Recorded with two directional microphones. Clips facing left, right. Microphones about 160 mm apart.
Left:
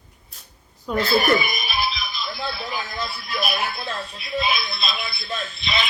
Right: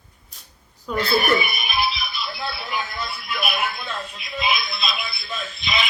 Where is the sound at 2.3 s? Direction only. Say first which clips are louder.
Left 2 dB; 35° left (ahead or behind).